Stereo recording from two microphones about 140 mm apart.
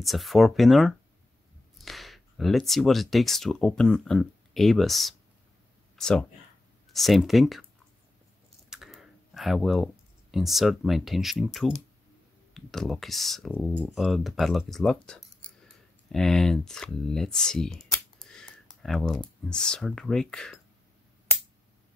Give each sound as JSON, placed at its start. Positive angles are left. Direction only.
{"t": 0.0, "sound": "speech", "side_deg": 0}
{"t": 8.6, "sound": "computer keyboard", "side_deg": -5}
{"t": 10.3, "sound": "speech", "side_deg": 0}